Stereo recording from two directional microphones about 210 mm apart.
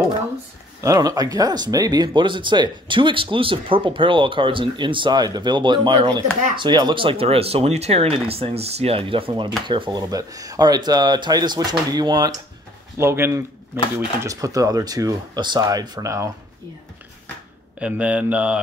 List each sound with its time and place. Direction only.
0.7 s speech: 15° right (ahead or behind)
17.7 s speech: 5° right (ahead or behind)